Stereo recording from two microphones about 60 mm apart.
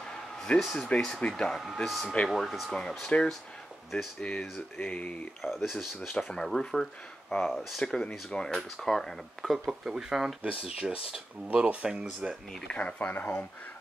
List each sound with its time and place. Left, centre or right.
0.1 s a sound: centre
0.6 s speech: centre
1.9 s speech: centre
2.7 s speech: centre
5.4 s speech: centre
8.5 s speech: centre
9.7 s speech: centre
10.4 s speech: centre
12.7 s speech: left